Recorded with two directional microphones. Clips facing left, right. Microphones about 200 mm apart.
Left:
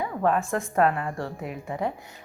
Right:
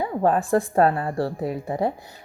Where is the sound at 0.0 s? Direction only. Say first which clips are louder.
Right 3 dB; 30° right (ahead or behind).